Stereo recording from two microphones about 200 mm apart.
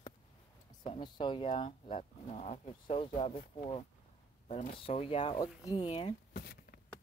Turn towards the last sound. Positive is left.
turn(degrees=50)  # may be behind; listen again after turning